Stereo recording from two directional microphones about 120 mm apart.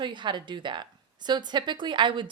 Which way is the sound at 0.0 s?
40° right (ahead or behind).